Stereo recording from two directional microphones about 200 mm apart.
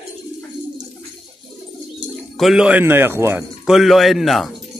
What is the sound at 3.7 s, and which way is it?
Speech, centre (ahead or behind).